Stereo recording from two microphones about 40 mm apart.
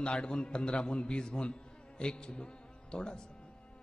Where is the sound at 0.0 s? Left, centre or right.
Left.